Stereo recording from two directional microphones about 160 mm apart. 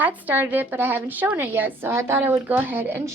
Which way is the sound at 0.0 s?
10° right (ahead or behind).